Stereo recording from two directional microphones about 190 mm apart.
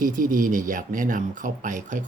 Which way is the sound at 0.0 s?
45° right (ahead or behind).